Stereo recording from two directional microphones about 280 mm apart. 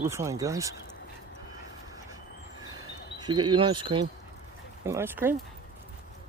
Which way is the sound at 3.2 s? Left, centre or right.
Centre.